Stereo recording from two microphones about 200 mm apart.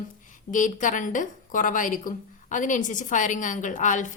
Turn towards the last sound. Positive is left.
turn(degrees=40)  # may be behind; listen again after turning